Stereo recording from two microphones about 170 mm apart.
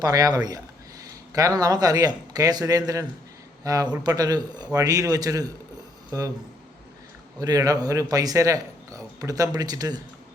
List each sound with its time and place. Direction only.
0.0 s speech: 20° right (ahead or behind)
7.3 s speech: 20° right (ahead or behind)